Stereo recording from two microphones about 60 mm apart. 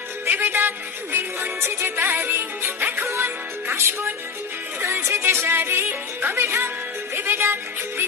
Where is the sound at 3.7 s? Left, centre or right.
Right.